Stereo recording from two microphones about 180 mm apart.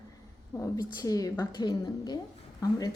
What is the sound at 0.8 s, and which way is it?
A woman's voice, 20° left (ahead or behind).